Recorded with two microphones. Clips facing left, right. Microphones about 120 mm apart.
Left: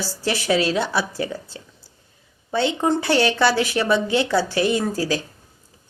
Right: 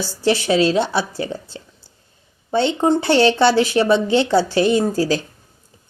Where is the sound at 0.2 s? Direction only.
25° right (ahead or behind).